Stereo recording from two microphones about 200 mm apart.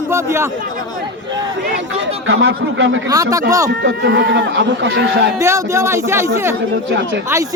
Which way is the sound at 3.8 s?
60° right (ahead or behind).